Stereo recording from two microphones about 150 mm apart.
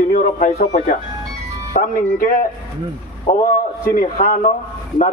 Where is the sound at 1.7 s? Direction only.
70° left (ahead or behind).